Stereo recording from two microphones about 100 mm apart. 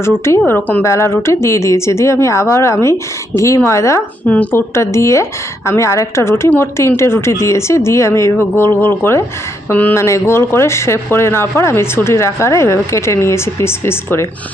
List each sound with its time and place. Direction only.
0.3 s a woman's voice: 25° left (ahead or behind)
4.3 s a woman's voice: 15° left (ahead or behind)
4.7 s a woman's voice: 30° left (ahead or behind)